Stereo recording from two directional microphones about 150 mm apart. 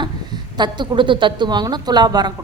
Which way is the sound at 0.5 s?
30° right (ahead or behind).